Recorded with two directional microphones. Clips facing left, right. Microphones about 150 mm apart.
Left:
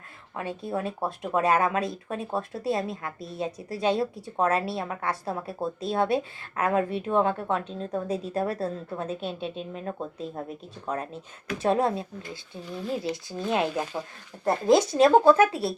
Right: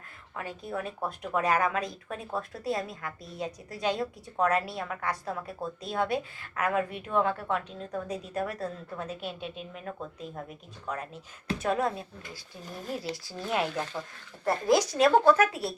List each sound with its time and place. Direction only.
0.3 s speech: 25° left (ahead or behind)